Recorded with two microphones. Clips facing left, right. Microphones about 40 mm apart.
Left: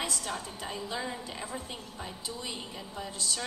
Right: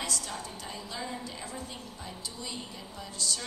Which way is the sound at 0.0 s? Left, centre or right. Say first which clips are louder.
Left 1 dB; left.